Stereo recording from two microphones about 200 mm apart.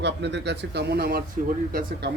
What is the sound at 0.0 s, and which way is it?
A man's voice, 60° right (ahead or behind).